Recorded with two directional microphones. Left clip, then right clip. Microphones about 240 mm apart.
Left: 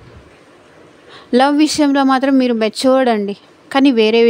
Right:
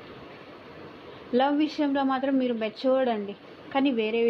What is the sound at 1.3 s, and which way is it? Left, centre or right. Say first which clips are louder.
Speech: left 12 dB; left.